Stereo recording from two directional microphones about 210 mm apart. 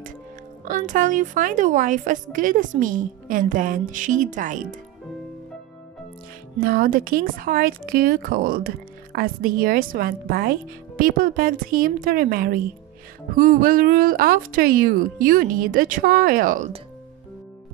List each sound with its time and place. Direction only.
0.7 s a woman's voice: 40° right (ahead or behind)
6.6 s a woman's voice: 45° right (ahead or behind)